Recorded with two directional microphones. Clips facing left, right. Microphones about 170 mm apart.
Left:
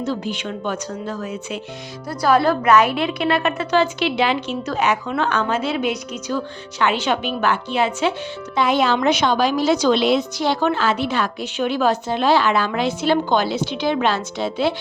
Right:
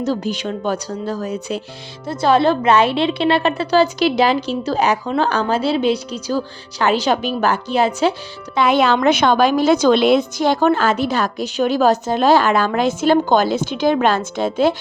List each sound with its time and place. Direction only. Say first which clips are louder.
0.0 s a woman's voice: right 4 dB; 40° right (ahead or behind)
2.0 s a woman's voice: right 2 dB; 25° right (ahead or behind)
8.5 s a woman's voice: right 3 dB; 60° right (ahead or behind); by 14.8 s 45° right (ahead or behind)